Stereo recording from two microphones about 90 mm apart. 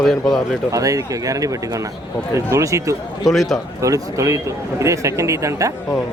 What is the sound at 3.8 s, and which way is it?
Speech, 35° right (ahead or behind).